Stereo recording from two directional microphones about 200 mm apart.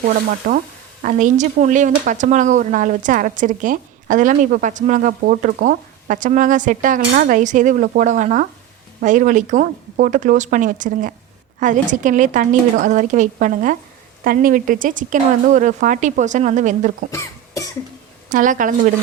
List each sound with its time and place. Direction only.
0.4 s stir: 45° right (ahead or behind)
1.0 s speech: 40° right (ahead or behind)
17.1 s cough: 15° left (ahead or behind)
18.3 s a woman's voice: 40° right (ahead or behind)